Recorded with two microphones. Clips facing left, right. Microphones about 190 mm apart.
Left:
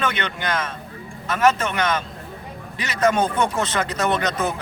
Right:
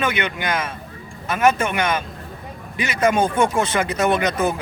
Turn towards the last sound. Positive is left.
turn(degrees=-10)  # may be behind; listen again after turning